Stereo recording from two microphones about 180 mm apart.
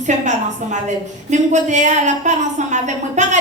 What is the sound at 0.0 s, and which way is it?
A woman's voice, 40° right (ahead or behind).